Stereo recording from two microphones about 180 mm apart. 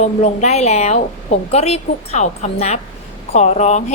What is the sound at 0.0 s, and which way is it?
A woman's voice, 40° left (ahead or behind).